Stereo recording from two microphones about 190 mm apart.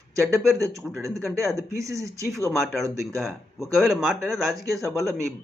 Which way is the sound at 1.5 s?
15° right (ahead or behind).